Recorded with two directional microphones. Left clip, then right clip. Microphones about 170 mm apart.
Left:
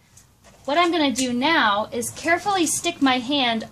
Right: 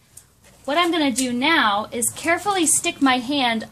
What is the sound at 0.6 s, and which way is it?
A woman's voice, 20° right (ahead or behind).